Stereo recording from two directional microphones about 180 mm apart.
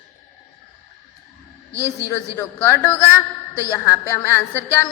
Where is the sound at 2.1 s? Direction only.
15° left (ahead or behind).